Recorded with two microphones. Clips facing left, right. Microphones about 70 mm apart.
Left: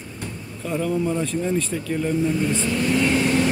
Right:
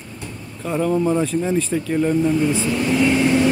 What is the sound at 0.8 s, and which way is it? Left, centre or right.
Speech, right.